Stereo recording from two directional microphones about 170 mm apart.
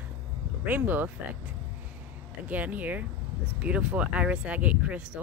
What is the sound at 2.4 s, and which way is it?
Speech, 10° right (ahead or behind).